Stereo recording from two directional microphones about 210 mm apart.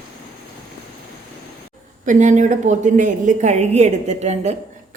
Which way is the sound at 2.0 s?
35° right (ahead or behind).